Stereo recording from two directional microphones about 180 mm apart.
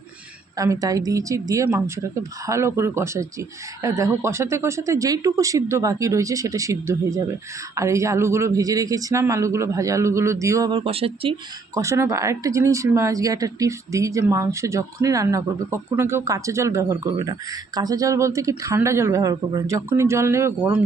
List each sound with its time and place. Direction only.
0.5 s speech: 20° right (ahead or behind)
11.7 s speech: 15° right (ahead or behind)